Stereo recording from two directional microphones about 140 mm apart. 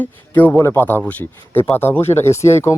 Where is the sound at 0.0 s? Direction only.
10° left (ahead or behind).